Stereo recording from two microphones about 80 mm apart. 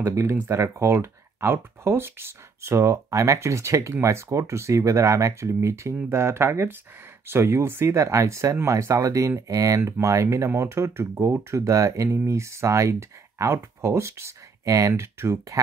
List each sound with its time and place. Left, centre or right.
0.1 s speech: right